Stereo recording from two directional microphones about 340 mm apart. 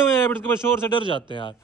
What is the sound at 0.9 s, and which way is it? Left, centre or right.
Speech, centre.